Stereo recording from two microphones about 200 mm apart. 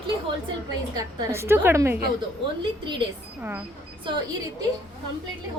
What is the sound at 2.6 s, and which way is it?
Speech, 25° right (ahead or behind).